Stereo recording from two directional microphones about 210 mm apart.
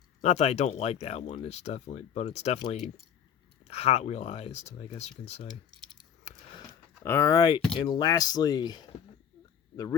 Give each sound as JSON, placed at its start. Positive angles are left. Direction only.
{"t": 0.2, "sound": "speech", "side_deg": 30}
{"t": 6.0, "sound": "a sound", "side_deg": 20}
{"t": 7.8, "sound": "speech", "side_deg": 20}